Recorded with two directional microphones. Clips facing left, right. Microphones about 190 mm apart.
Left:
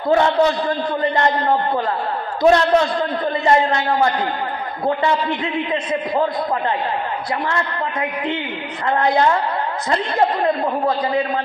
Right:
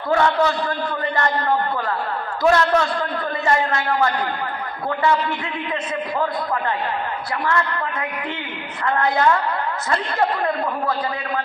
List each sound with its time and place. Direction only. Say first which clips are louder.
0.1 s a man's voice: left 3 dB; 20° left (ahead or behind)
2.4 s a man's voice: left 3 dB; 25° left (ahead or behind)
5.7 s a man's voice: left 4 dB; 25° left (ahead or behind)
8.8 s a man's voice: left 2 dB; 25° left (ahead or behind)